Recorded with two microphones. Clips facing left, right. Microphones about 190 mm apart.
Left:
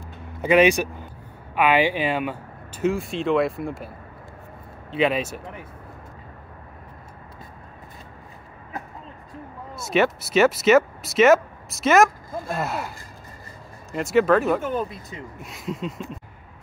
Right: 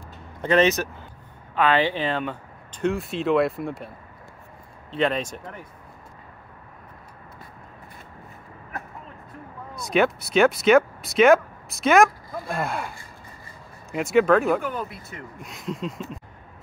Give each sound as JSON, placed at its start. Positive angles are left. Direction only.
{"t": 0.4, "sound": "speech", "side_deg": 10}
{"t": 4.9, "sound": "speech", "side_deg": 5}
{"t": 9.8, "sound": "speech", "side_deg": 0}
{"t": 13.9, "sound": "speech", "side_deg": 0}
{"t": 14.6, "sound": "speech", "side_deg": 20}
{"t": 15.3, "sound": "speech", "side_deg": 0}